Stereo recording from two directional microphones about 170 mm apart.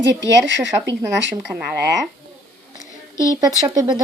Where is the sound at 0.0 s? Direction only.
90° right.